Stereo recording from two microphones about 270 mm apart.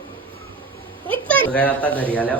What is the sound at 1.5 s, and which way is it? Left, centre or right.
Speech, centre.